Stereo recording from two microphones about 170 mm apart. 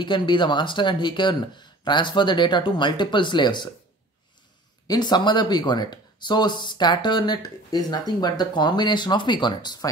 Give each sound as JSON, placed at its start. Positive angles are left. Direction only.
{"t": 0.0, "sound": "speech", "side_deg": 25}
{"t": 4.8, "sound": "speech", "side_deg": 25}